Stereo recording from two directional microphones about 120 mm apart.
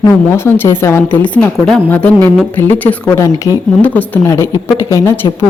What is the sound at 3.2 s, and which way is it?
Speech, 25° left (ahead or behind).